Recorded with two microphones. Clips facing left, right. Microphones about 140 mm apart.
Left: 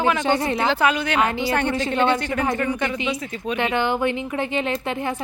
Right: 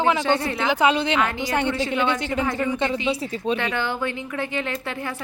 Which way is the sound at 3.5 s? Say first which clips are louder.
Left 6 dB; 20° left (ahead or behind).